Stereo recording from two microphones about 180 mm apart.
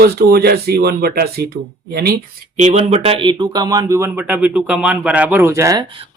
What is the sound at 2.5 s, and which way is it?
Speech, 40° right (ahead or behind).